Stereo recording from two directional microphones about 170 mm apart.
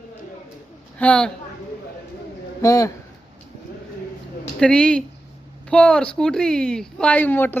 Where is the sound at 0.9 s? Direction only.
5° left (ahead or behind).